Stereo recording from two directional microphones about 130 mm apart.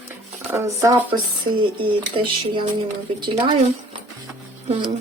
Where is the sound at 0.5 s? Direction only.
20° right (ahead or behind).